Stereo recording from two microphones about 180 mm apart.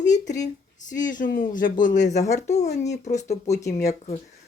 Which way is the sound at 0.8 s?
45° left (ahead or behind).